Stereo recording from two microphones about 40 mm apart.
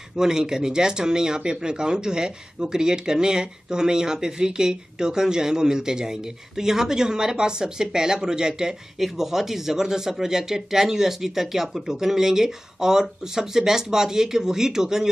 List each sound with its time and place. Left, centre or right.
0.2 s speech: centre